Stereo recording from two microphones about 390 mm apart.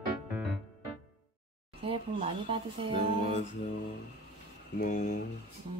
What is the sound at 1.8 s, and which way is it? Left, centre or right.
Speech, centre.